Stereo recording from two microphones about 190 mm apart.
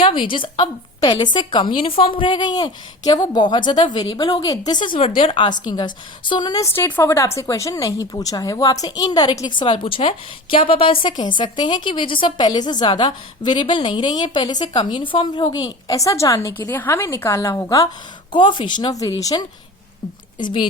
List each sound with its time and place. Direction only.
0.0 s a woman's voice: 25° left (ahead or behind)